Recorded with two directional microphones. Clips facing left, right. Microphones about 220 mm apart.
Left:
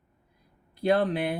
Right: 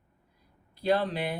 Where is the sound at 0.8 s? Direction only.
55° left (ahead or behind).